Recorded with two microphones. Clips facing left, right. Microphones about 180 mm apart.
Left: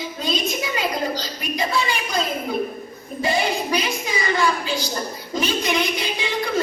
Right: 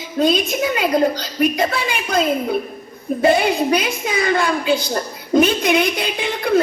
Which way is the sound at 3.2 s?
60° right (ahead or behind).